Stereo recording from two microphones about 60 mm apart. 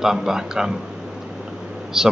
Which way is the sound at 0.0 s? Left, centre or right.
Centre.